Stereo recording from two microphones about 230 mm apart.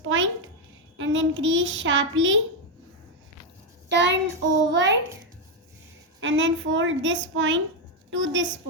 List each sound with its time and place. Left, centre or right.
0.0 s a sound: right
0.9 s a child's voice: right
3.8 s a child's voice: right
6.1 s a child's voice: right